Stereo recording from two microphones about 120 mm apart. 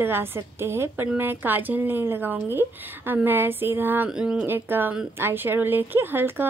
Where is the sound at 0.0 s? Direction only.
20° right (ahead or behind).